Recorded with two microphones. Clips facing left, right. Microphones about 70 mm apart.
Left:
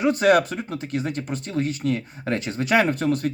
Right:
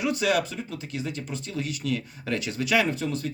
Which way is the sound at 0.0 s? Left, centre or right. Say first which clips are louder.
Left 7 dB; left.